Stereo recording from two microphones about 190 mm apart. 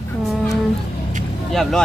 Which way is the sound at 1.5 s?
Centre (ahead or behind).